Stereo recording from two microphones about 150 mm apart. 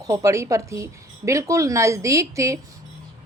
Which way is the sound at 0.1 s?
20° right (ahead or behind).